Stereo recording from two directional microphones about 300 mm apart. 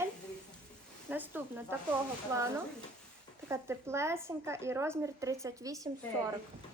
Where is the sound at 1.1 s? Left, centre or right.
Centre.